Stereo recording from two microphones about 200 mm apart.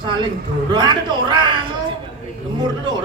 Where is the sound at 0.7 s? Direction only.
20° right (ahead or behind).